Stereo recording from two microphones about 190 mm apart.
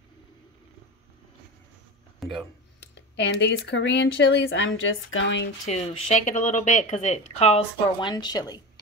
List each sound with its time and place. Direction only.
2.1 s a sound: centre (ahead or behind)
2.9 s speech: 65° left (ahead or behind)
5.7 s speech: 35° left (ahead or behind); by 8.5 s 20° left (ahead or behind)